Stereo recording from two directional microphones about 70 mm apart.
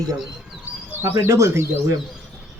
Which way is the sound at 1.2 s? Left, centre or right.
Right.